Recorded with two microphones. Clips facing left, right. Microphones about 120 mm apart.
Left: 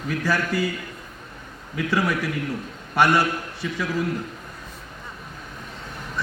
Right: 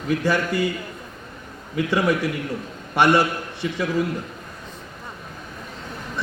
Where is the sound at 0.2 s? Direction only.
25° right (ahead or behind).